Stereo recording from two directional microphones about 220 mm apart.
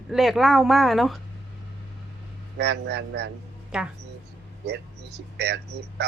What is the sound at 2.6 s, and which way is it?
Speech, 50° right (ahead or behind).